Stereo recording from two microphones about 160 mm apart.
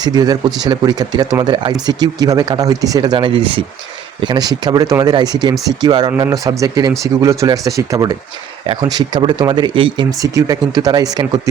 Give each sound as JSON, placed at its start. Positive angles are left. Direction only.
{"t": 0.0, "sound": "speech", "side_deg": -25}